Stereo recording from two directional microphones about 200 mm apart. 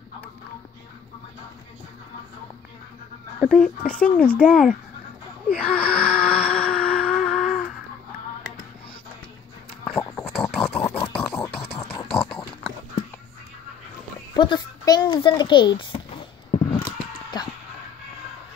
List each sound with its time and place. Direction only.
3.3 s speech: 5° left (ahead or behind)
5.6 s wail: 5° left (ahead or behind)
9.8 s dog: 5° left (ahead or behind)
11.0 s a sound: 15° left (ahead or behind)
12.1 s horse: centre (ahead or behind)
14.3 s a child's voice: 20° left (ahead or behind)
16.8 s a sound: 20° left (ahead or behind)